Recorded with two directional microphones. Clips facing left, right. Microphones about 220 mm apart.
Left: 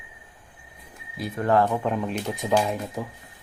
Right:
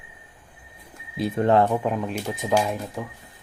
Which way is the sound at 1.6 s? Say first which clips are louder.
Right 1 dB; 10° right (ahead or behind).